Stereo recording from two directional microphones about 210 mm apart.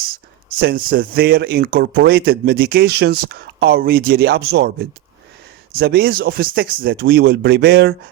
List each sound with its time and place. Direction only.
0.6 s speech: 45° right (ahead or behind)